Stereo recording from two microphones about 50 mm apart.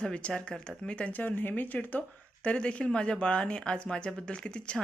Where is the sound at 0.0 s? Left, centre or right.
Left.